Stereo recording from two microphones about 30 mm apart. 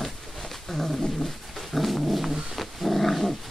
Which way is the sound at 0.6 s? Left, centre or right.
Centre.